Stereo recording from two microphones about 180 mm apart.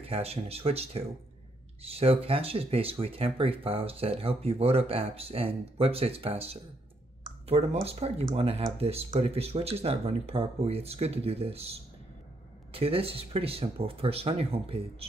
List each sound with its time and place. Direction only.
0.0 s speech: 35° right (ahead or behind)
12.7 s speech: 35° right (ahead or behind)